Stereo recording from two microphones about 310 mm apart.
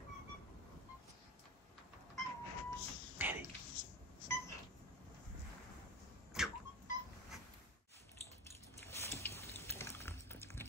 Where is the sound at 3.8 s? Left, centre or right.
Right.